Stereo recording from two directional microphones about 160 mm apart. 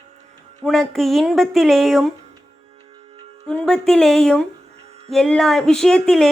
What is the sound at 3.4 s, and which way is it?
A woman's voice, 5° left (ahead or behind).